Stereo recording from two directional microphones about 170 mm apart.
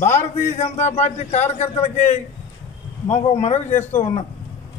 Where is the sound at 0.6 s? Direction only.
40° left (ahead or behind).